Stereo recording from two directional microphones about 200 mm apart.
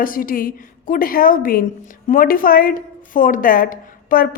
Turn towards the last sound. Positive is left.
turn(degrees=45)  # may be behind; listen again after turning